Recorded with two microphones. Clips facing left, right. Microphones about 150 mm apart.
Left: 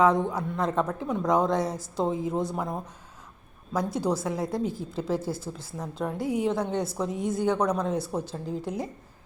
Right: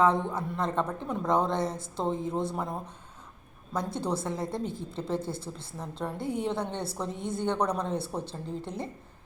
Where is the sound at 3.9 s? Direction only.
5° left (ahead or behind).